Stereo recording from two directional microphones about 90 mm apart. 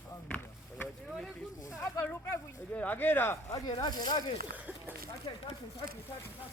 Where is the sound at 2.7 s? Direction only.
20° left (ahead or behind).